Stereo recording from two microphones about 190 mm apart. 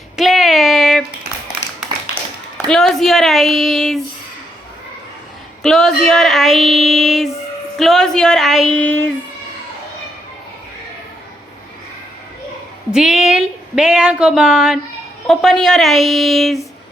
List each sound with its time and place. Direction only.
0.2 s a sound: centre (ahead or behind)
2.6 s speech: 5° left (ahead or behind)
5.6 s speech: centre (ahead or behind)
12.9 s speech: 5° right (ahead or behind)